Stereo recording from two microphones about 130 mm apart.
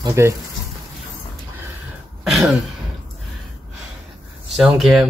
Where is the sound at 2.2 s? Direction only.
5° right (ahead or behind).